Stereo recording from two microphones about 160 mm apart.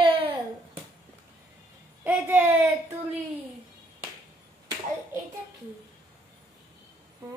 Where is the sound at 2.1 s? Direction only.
10° right (ahead or behind).